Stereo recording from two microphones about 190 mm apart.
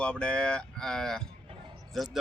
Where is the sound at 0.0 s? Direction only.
5° left (ahead or behind).